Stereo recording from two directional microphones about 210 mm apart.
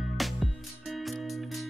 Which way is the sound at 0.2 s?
Centre (ahead or behind).